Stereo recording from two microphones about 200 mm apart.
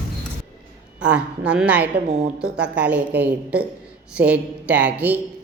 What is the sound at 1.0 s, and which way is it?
Speech, 5° right (ahead or behind).